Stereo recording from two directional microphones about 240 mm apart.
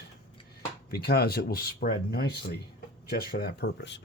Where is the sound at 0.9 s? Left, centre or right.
Left.